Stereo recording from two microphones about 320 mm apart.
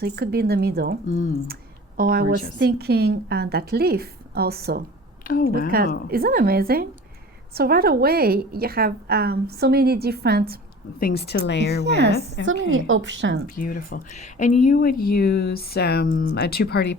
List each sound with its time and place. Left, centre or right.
0.0 s a woman's voice: right
1.0 s speech: left
2.0 s a woman's voice: right
5.2 s speech: left
5.7 s a woman's voice: right
11.0 s speech: left
11.8 s a woman's voice: right
12.4 s speech: left
12.7 s a woman's voice: right
13.6 s speech: left